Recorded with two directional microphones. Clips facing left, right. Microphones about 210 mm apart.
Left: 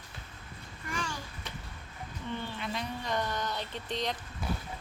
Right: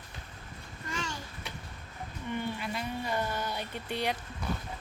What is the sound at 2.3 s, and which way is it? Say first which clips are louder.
Speech: right 3 dB; 10° right (ahead or behind).